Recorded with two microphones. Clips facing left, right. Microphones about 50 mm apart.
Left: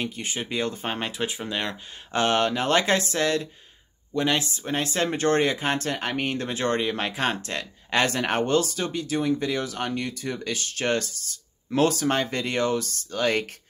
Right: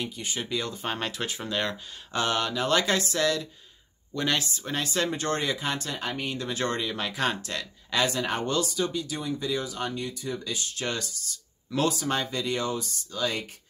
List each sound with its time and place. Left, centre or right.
0.0 s speech: left
0.8 s speech: left
2.1 s speech: left
4.1 s speech: left
6.5 s speech: left